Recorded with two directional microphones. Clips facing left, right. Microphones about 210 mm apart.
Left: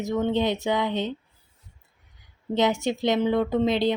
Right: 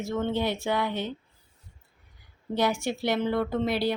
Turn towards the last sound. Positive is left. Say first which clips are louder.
# left 4 dB
turn(degrees=20)  # may be behind; listen again after turning